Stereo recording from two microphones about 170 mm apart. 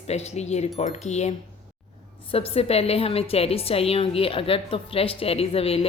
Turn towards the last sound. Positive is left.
turn(degrees=35)  # may be behind; listen again after turning